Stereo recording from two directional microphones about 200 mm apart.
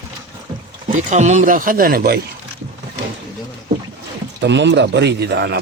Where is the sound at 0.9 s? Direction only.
35° right (ahead or behind).